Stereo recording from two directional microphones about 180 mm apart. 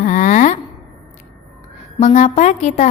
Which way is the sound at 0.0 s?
45° left (ahead or behind).